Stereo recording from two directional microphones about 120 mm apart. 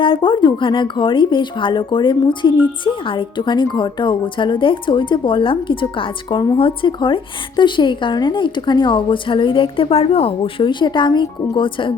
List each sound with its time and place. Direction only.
0.0 s a woman's voice: 45° left (ahead or behind)